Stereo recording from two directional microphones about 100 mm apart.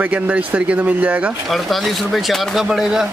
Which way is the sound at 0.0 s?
15° right (ahead or behind).